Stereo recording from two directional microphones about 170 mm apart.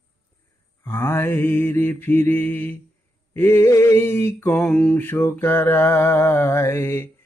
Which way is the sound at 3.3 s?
15° left (ahead or behind).